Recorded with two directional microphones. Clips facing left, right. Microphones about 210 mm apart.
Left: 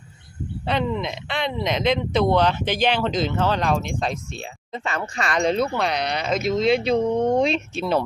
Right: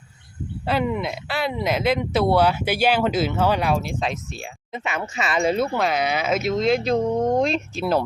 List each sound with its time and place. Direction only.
0.7 s speech: 10° right (ahead or behind)
4.7 s speech: 15° right (ahead or behind)
4.9 s speech: 5° right (ahead or behind)